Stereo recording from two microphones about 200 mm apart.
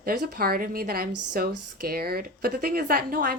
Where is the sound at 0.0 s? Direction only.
50° right (ahead or behind).